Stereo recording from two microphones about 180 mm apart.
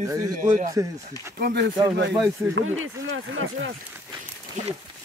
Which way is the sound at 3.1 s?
90° right.